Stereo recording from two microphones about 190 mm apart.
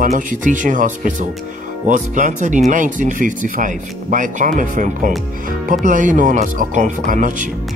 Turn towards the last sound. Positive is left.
turn(degrees=-40)  # may be behind; listen again after turning